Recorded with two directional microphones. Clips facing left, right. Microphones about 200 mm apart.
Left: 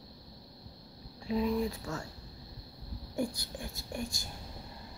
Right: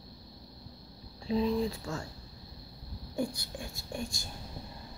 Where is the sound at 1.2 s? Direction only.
30° right (ahead or behind).